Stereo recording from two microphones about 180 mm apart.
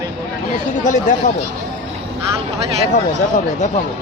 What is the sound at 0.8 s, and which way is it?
Speech, 45° left (ahead or behind).